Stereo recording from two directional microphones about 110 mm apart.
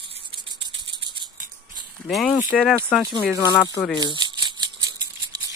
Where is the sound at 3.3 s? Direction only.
35° left (ahead or behind).